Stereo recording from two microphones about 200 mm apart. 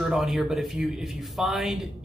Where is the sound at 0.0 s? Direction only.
Centre (ahead or behind).